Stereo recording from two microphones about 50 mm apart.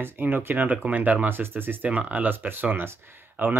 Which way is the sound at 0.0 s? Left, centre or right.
Right.